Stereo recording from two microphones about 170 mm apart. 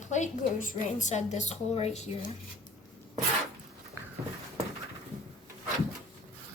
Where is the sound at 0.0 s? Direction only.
45° left (ahead or behind).